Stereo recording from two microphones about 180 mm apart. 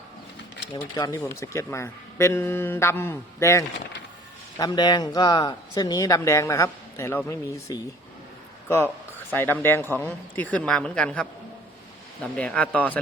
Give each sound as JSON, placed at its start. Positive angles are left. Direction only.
{"t": 0.7, "sound": "speech", "side_deg": 20}
{"t": 9.3, "sound": "speech", "side_deg": 10}
{"t": 12.4, "sound": "speech", "side_deg": 5}